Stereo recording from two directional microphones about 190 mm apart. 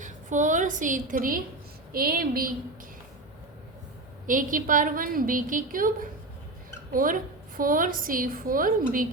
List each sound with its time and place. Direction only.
0.0 s a woman's voice: 40° right (ahead or behind)
4.3 s a woman's voice: 45° right (ahead or behind)